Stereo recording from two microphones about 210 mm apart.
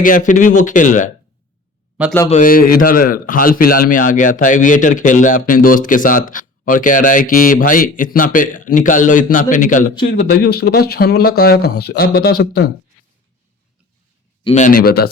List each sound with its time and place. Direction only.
0.0 s a man's voice: 40° left (ahead or behind)
2.0 s a man's voice: 5° right (ahead or behind)
2.3 s a man's voice: 40° left (ahead or behind)
14.4 s speech: 35° left (ahead or behind)